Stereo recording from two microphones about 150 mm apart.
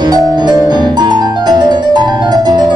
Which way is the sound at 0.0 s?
30° right (ahead or behind).